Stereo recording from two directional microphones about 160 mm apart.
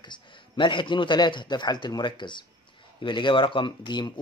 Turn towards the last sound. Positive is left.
turn(degrees=30)  # may be behind; listen again after turning